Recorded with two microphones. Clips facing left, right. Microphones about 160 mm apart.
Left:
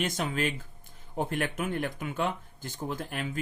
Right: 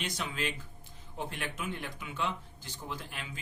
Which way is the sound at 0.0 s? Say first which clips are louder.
Left 6 dB; 50° left (ahead or behind).